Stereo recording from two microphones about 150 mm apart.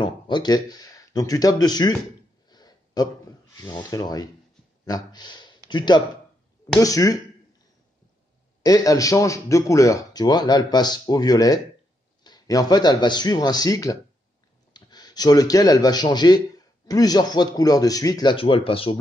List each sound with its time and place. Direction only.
0.0 s a man's voice: 30° left (ahead or behind)
8.6 s a man's voice: 25° left (ahead or behind)